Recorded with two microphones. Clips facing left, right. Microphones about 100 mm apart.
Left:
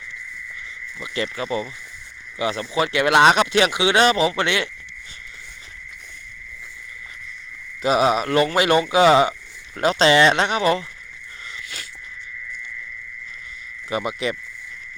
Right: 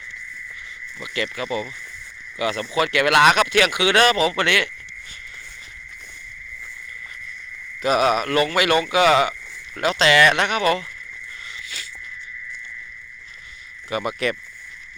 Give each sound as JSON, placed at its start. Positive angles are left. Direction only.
{"t": 0.9, "sound": "speech", "side_deg": 30}
{"t": 7.8, "sound": "speech", "side_deg": 25}
{"t": 14.0, "sound": "speech", "side_deg": 15}